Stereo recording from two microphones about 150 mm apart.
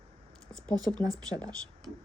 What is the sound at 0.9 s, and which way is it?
Speech, 5° left (ahead or behind).